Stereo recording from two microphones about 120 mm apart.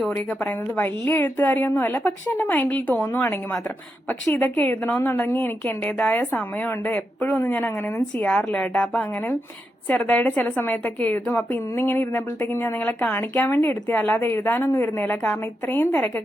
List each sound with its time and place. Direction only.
0.1 s a woman's voice: 15° left (ahead or behind)
7.3 s a woman's voice: 15° left (ahead or behind)
15.1 s a woman's voice: 10° left (ahead or behind)